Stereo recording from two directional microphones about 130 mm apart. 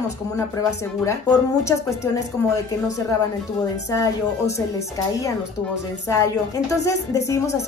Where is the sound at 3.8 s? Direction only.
25° left (ahead or behind).